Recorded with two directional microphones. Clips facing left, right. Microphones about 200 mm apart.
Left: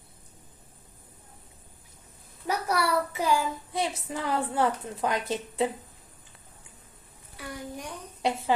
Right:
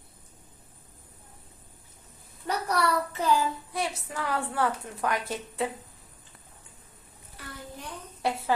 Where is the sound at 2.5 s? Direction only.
10° left (ahead or behind).